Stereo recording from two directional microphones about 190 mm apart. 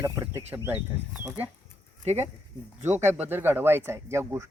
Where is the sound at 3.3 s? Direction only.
10° right (ahead or behind).